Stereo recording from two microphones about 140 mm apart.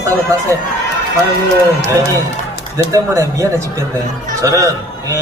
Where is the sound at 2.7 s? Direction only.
20° right (ahead or behind).